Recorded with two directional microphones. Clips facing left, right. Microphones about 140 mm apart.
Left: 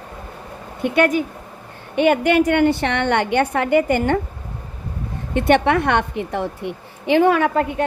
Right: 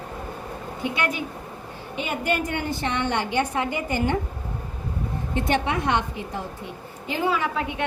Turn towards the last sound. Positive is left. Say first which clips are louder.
# left 8 dB
turn(degrees=45)  # may be behind; listen again after turning